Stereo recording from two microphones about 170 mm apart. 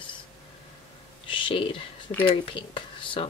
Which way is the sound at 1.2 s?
30° left (ahead or behind).